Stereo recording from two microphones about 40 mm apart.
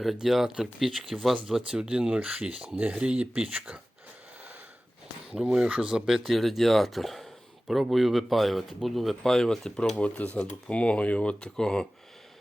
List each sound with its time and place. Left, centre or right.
0.0 s speech: centre
1.6 s speech: centre
5.4 s speech: centre
5.7 s speech: right
6.1 s speech: centre
6.3 s speech: centre
10.0 s speech: left; by 11.9 s centre